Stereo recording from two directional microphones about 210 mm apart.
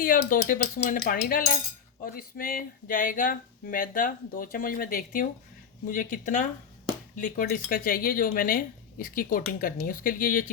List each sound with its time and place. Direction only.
0.0 s speech: 40° left (ahead or behind)